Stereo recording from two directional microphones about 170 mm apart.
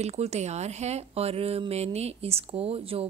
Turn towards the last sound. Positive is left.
turn(degrees=-35)  # may be behind; listen again after turning